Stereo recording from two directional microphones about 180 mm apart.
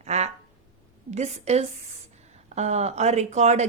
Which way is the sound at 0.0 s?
35° right (ahead or behind).